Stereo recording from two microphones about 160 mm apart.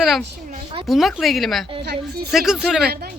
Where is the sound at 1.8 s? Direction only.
90° right.